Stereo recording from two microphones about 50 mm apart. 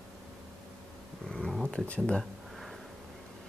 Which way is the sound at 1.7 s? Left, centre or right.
Left.